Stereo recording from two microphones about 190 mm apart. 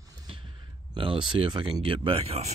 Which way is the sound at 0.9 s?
25° right (ahead or behind).